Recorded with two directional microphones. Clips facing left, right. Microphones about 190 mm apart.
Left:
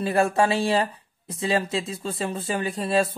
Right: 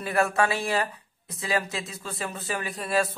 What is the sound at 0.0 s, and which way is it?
Speech, 30° left (ahead or behind).